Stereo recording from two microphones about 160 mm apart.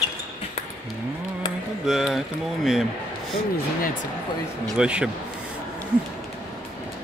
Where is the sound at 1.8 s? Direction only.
Centre (ahead or behind).